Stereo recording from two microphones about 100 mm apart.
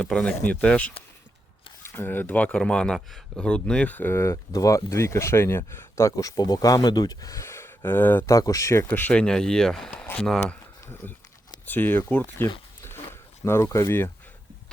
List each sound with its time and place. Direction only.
0.0 s speech: 10° left (ahead or behind)
8.4 s speech: 35° left (ahead or behind); by 10.6 s 5° left (ahead or behind)
11.0 s speech: 20° left (ahead or behind)